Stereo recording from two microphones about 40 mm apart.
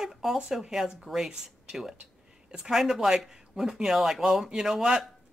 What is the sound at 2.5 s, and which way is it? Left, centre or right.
Speech, right.